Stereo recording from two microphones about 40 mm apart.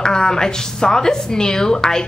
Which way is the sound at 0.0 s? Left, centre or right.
Centre.